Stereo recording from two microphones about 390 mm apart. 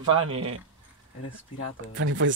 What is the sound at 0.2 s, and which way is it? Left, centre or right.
Speech, centre.